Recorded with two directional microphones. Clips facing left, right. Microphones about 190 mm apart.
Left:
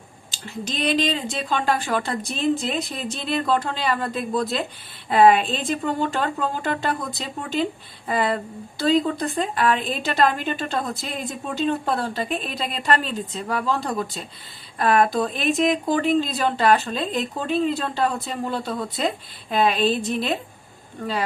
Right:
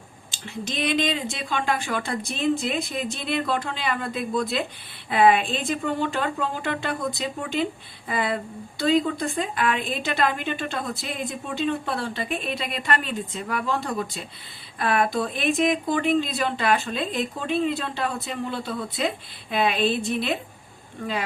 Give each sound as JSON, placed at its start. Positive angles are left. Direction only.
{"t": 0.4, "sound": "speech", "side_deg": 40}